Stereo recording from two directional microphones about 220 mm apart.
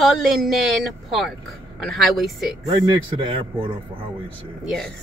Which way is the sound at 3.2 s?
25° right (ahead or behind).